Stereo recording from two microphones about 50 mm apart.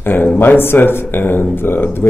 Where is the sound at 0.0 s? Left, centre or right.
Left.